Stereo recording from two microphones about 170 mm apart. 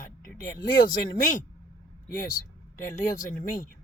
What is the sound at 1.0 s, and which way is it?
Speech, 50° left (ahead or behind).